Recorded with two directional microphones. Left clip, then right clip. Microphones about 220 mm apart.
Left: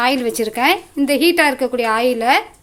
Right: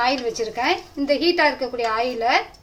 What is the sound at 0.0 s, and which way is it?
Speech, 55° left (ahead or behind).